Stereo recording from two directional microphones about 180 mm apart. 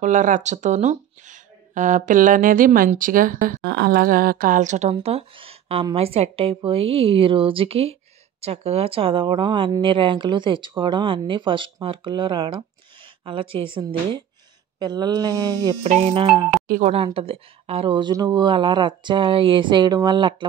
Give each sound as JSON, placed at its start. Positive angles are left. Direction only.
{"t": 0.0, "sound": "speech", "side_deg": -45}
{"t": 3.6, "sound": "speech", "side_deg": -70}
{"t": 4.9, "sound": "a woman's voice", "side_deg": -30}
{"t": 15.8, "sound": "speech", "side_deg": -35}
{"t": 16.6, "sound": "speech", "side_deg": -55}
{"t": 16.9, "sound": "a woman's voice", "side_deg": -30}